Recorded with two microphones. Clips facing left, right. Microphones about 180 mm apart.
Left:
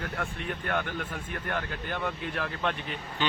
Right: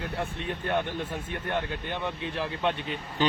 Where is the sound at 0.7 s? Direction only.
25° right (ahead or behind).